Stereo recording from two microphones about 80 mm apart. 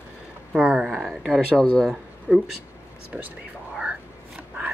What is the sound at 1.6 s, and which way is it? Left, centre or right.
Speech, centre.